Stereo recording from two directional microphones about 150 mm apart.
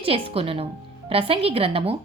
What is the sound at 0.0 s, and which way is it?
Speech, 40° right (ahead or behind).